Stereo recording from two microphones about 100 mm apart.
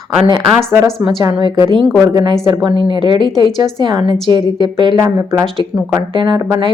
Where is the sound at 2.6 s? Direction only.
55° right (ahead or behind).